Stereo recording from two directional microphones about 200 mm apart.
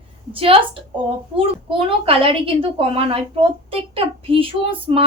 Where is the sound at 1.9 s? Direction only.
25° right (ahead or behind).